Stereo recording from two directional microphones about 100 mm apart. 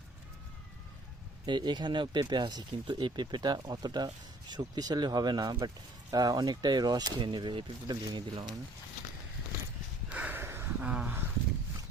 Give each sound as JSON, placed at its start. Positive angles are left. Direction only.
{"t": 1.5, "sound": "speech", "side_deg": -50}
{"t": 10.1, "sound": "a sound", "side_deg": -15}
{"t": 10.8, "sound": "speech", "side_deg": -10}